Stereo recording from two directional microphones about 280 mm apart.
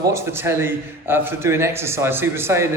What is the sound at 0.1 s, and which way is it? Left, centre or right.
A man's voice, centre.